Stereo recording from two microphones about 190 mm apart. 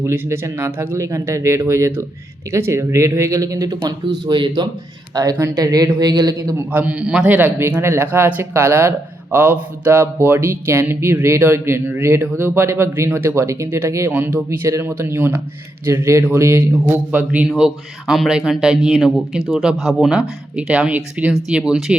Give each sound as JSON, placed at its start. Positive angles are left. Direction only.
{"t": 0.0, "sound": "a man's voice", "side_deg": -15}
{"t": 6.7, "sound": "a man's voice", "side_deg": -5}